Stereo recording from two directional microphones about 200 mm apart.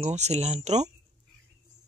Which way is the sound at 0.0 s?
35° right (ahead or behind).